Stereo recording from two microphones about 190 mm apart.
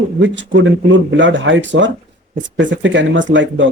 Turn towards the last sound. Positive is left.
turn(degrees=-75)  # may be behind; listen again after turning